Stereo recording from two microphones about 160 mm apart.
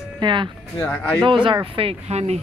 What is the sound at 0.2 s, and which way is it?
Speech, 30° right (ahead or behind).